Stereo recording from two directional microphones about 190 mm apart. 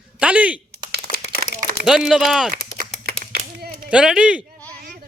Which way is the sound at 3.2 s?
55° right (ahead or behind).